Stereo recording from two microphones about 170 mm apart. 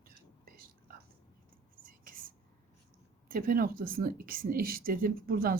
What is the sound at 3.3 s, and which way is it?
Speech, 60° right (ahead or behind).